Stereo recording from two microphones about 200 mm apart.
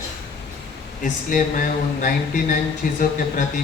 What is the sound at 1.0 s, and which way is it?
Speech, 40° left (ahead or behind).